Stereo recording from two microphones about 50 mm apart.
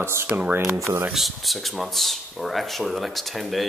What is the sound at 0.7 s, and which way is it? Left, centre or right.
Speech, right.